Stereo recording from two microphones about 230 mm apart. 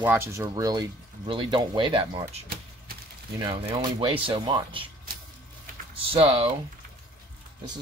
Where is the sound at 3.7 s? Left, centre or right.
Right.